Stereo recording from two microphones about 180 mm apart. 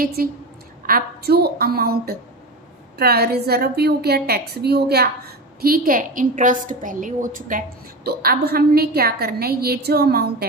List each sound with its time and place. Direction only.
0.0 s a woman's voice: 55° right (ahead or behind)